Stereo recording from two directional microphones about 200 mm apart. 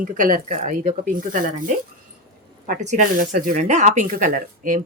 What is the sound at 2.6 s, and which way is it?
Speech, 40° right (ahead or behind).